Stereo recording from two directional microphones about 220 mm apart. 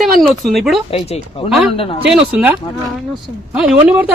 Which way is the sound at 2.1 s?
5° right (ahead or behind).